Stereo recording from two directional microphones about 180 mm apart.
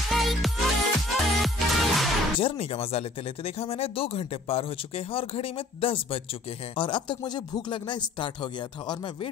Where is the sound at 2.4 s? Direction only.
30° left (ahead or behind).